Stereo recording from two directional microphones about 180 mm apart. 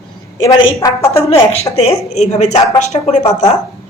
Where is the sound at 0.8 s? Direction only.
15° left (ahead or behind).